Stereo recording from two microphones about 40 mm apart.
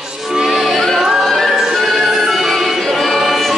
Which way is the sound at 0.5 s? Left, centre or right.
Centre.